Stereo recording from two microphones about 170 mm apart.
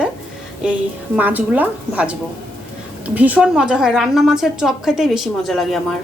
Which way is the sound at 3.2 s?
10° right (ahead or behind).